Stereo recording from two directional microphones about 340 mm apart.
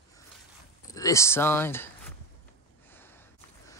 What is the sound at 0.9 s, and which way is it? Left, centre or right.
Speech, centre.